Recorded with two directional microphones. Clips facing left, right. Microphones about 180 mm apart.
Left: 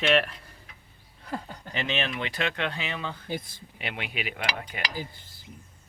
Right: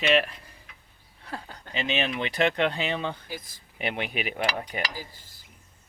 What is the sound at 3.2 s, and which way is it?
Speech, 25° left (ahead or behind).